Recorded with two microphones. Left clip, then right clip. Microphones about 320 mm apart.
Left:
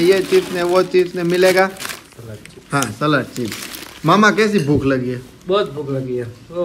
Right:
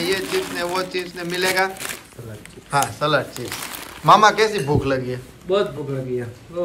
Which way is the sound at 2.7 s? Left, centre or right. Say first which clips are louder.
Left 1 dB; centre.